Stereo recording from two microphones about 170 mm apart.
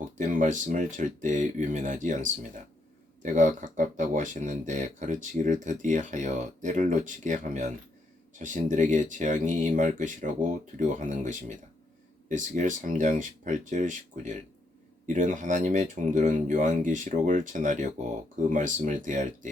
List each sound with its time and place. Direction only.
0.0 s speech: 50° right (ahead or behind)
3.3 s speech: 50° right (ahead or behind)